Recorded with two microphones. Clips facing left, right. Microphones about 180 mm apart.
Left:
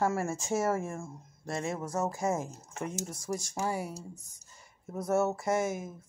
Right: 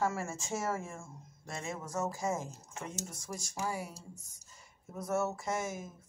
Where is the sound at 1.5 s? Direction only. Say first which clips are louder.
Left 5 dB; 35° left (ahead or behind).